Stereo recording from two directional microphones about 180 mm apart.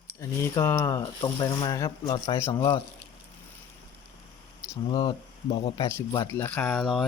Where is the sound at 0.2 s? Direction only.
15° left (ahead or behind).